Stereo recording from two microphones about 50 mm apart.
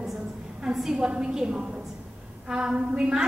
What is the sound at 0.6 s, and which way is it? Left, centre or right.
A woman's voice, centre.